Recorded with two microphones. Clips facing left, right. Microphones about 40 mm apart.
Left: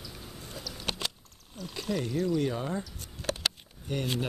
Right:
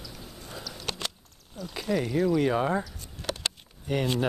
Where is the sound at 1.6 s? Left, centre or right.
Centre.